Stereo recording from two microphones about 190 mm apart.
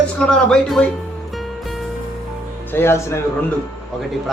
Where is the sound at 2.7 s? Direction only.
10° left (ahead or behind).